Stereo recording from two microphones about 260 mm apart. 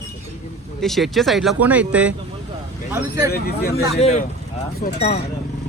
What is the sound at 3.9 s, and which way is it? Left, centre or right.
Speech, left.